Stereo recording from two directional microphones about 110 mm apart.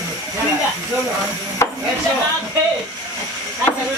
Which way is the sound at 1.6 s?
25° left (ahead or behind).